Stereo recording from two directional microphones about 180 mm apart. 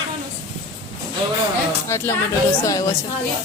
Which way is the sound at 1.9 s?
15° left (ahead or behind).